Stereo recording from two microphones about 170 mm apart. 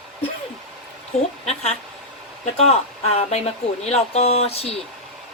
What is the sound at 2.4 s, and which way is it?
Speech, 40° left (ahead or behind).